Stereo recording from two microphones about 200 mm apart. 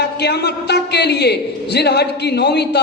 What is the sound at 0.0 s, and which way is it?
A man's voice, 55° left (ahead or behind).